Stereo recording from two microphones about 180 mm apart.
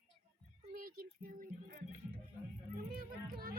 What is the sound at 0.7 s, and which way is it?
Speech, 55° right (ahead or behind).